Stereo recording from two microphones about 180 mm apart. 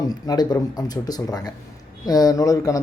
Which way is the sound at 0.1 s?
20° left (ahead or behind).